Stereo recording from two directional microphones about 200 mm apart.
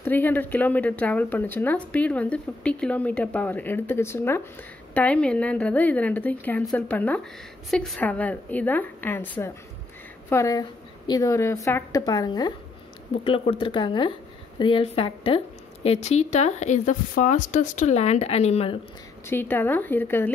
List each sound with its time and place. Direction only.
0.0 s speech: 10° left (ahead or behind); by 18.8 s 30° left (ahead or behind)
19.2 s speech: 10° left (ahead or behind)